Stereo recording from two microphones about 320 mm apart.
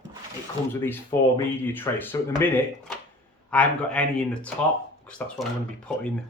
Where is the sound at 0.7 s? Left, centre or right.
Centre.